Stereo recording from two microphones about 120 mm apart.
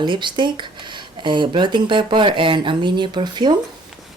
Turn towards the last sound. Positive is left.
turn(degrees=-40)  # may be behind; listen again after turning